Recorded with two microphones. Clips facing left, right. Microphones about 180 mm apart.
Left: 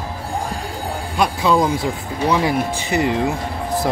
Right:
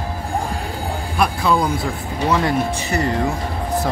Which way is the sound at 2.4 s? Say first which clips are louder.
Even; 15° left (ahead or behind).